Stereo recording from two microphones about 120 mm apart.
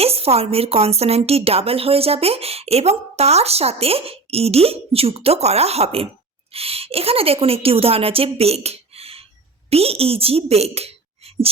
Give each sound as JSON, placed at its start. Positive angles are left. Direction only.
{"t": 0.0, "sound": "a woman's voice", "side_deg": -55}